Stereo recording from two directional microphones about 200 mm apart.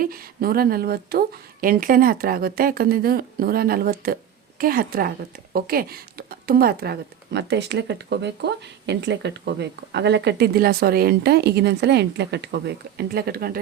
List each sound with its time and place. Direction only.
0.0 s a woman's voice: 50° right (ahead or behind)